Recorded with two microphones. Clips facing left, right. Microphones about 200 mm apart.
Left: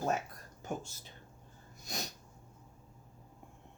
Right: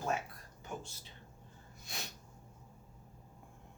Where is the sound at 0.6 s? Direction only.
45° left (ahead or behind).